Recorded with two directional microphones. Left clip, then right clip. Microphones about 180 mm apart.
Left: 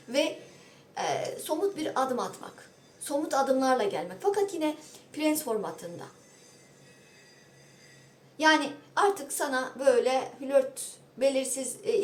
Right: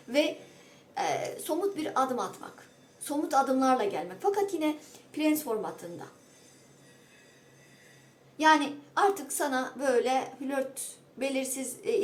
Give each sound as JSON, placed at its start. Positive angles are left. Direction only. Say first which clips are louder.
{"t": 0.9, "sound": "a woman's voice", "louder": "even", "side_deg": -10}
{"t": 8.4, "sound": "a woman's voice", "louder": "even", "side_deg": -5}